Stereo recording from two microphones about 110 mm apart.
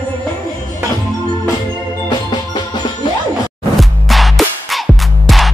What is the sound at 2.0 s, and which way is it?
Music, 45° left (ahead or behind).